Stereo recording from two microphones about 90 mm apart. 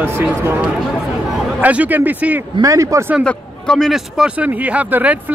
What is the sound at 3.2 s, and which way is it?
Speech, 10° left (ahead or behind).